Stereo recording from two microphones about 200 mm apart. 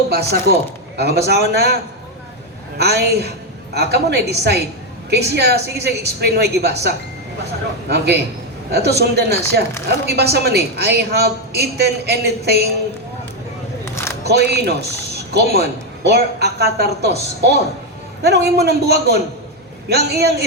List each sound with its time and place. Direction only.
0.1 s a woman's voice: 55° right (ahead or behind)
2.7 s a woman's voice: 55° right (ahead or behind)
14.3 s a woman's voice: 55° right (ahead or behind)